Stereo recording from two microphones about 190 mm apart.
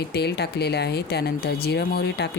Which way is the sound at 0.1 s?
60° left (ahead or behind).